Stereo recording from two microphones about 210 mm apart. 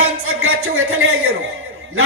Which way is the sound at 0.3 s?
75° right (ahead or behind).